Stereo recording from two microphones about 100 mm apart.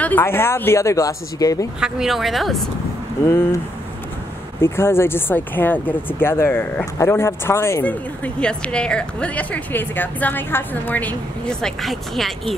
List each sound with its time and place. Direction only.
0.0 s speech: 20° left (ahead or behind)
1.8 s a woman's voice: 5° right (ahead or behind)
3.2 s speech: 25° left (ahead or behind)
4.6 s speech: 25° left (ahead or behind)
7.8 s speech: 10° left (ahead or behind)
11.6 s a woman's voice: centre (ahead or behind)